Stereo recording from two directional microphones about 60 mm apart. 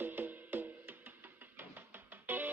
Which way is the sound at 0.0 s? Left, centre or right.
Right.